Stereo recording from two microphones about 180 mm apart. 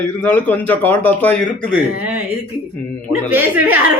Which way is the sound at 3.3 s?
10° right (ahead or behind).